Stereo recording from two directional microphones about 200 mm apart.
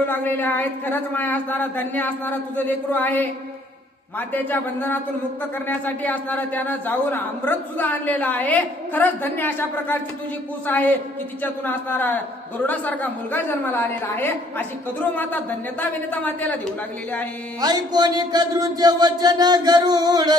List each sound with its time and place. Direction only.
0.0 s a man's voice: 10° left (ahead or behind)
4.3 s a man's voice: 10° left (ahead or behind)
17.6 s speech: 20° right (ahead or behind)